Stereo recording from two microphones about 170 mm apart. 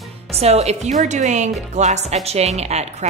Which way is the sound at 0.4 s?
40° right (ahead or behind).